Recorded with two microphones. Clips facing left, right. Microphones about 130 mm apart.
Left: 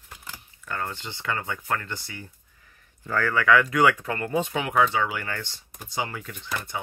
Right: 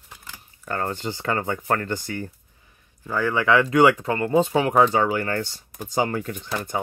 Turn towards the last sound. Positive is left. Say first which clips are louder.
# right 7 dB
turn(degrees=-45)  # may be behind; listen again after turning